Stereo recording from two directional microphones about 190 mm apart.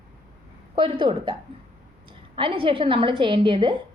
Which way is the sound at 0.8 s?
25° right (ahead or behind).